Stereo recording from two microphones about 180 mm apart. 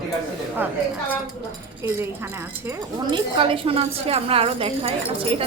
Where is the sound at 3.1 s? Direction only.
30° right (ahead or behind).